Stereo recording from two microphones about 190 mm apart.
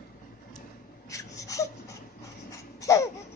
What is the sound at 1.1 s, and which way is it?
Whimper, 15° left (ahead or behind).